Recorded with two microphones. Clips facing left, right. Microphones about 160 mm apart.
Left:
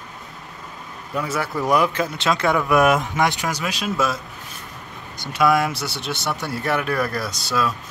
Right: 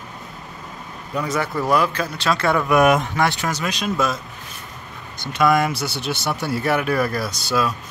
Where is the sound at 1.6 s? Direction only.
20° left (ahead or behind).